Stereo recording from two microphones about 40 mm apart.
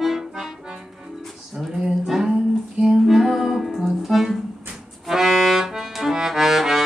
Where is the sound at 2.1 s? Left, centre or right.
Centre.